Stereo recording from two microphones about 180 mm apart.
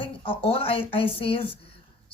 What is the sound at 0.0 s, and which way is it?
A man's voice, 30° left (ahead or behind).